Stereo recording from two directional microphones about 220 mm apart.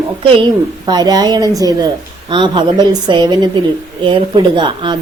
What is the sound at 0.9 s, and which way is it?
A woman's voice, 20° right (ahead or behind).